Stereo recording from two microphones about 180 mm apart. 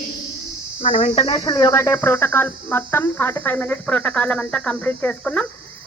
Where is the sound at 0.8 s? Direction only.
35° left (ahead or behind); by 5.5 s 5° left (ahead or behind).